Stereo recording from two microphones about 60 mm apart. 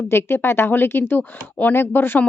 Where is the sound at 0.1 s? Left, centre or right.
Left.